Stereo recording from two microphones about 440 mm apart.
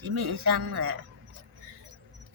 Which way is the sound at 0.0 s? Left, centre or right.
Right.